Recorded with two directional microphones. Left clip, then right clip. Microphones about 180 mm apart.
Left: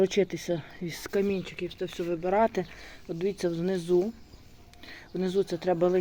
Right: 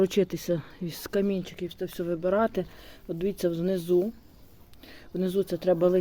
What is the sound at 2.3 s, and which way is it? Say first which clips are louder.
Speech: left 1 dB; 30° right (ahead or behind).